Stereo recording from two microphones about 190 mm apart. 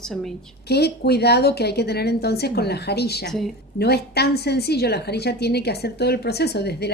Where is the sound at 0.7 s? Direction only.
60° left (ahead or behind).